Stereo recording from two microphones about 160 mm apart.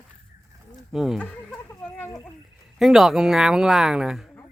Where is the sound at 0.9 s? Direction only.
5° right (ahead or behind).